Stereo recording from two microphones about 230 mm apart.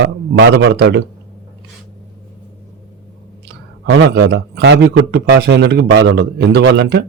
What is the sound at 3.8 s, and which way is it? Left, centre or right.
Speech, right.